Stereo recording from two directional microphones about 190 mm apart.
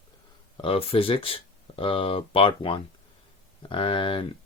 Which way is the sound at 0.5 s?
30° left (ahead or behind).